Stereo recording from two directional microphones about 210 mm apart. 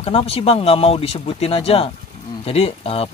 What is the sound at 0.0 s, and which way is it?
Speech, 25° left (ahead or behind).